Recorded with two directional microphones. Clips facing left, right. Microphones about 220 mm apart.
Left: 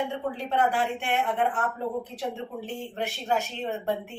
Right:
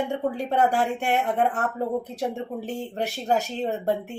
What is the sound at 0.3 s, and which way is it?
Speech, 40° right (ahead or behind).